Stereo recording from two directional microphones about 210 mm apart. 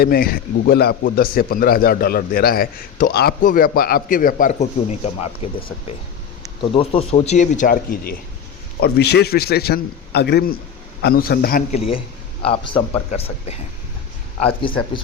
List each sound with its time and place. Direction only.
0.0 s speech: 45° left (ahead or behind)
11.7 s speech: 25° left (ahead or behind)